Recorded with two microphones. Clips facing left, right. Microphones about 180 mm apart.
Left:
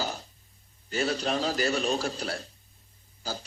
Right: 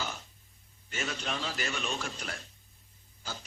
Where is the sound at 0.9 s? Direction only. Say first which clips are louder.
Left 8 dB; 35° left (ahead or behind).